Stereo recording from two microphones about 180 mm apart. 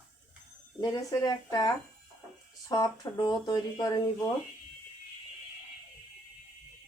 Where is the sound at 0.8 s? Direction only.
20° left (ahead or behind).